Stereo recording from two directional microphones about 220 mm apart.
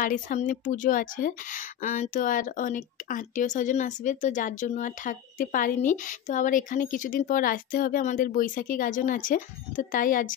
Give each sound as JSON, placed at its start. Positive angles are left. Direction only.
{"t": 0.0, "sound": "a woman's voice", "side_deg": 35}